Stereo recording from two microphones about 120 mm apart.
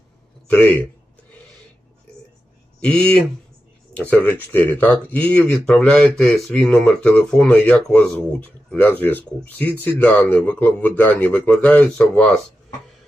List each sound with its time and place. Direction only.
0.5 s speech: 15° left (ahead or behind)
2.8 s speech: 10° left (ahead or behind)